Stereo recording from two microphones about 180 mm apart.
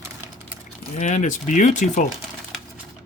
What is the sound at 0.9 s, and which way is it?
Speech, 40° left (ahead or behind).